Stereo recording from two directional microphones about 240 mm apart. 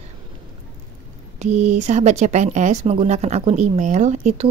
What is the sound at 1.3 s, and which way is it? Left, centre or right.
Speech, right.